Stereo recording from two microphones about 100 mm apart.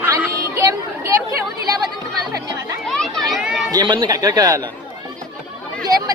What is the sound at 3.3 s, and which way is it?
Chatter, 5° right (ahead or behind).